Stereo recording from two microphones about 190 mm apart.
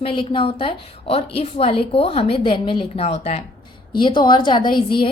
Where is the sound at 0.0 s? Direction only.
25° left (ahead or behind).